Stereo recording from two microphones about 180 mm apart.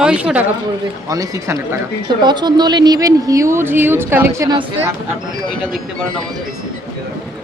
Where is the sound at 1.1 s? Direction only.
20° right (ahead or behind).